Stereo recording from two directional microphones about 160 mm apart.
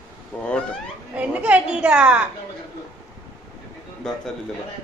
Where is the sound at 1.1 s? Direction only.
10° right (ahead or behind).